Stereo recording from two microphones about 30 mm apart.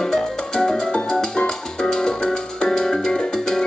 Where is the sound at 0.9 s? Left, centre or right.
Left.